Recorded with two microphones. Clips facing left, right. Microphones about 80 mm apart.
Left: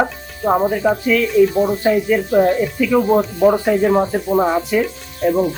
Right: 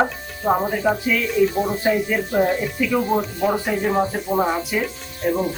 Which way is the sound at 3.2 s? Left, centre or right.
Centre.